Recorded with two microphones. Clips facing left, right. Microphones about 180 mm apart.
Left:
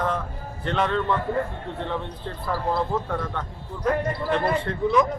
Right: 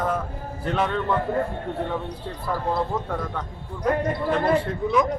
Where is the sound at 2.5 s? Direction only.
Centre (ahead or behind).